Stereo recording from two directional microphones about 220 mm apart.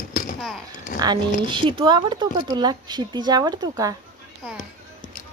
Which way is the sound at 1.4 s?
20° right (ahead or behind).